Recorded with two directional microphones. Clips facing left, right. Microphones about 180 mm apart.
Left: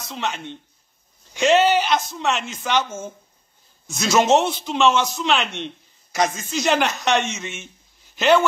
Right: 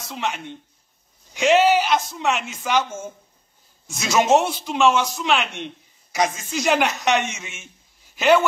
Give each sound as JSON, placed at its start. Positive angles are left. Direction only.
{"t": 0.1, "sound": "a man's voice", "side_deg": -5}